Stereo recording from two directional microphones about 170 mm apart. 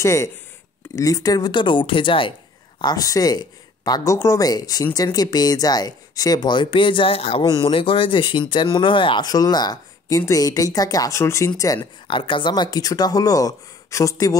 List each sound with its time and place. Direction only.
0.0 s speech: 15° left (ahead or behind)